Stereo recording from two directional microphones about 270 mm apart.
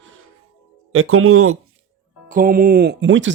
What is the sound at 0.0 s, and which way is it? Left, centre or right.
Music, right.